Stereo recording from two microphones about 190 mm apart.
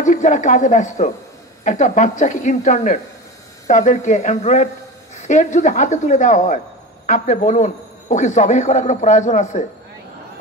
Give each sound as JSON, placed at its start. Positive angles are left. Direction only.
{"t": 0.0, "sound": "a man's voice", "side_deg": 40}